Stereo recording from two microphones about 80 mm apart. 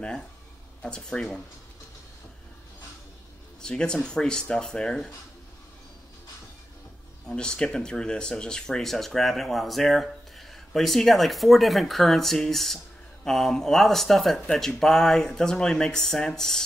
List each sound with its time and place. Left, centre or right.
0.8 s speech: centre
3.6 s speech: centre
7.2 s speech: centre